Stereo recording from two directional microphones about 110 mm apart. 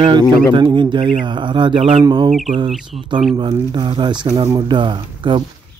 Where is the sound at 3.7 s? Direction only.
45° right (ahead or behind).